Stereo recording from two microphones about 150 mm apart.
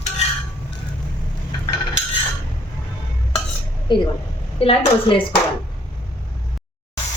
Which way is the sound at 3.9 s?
30° left (ahead or behind).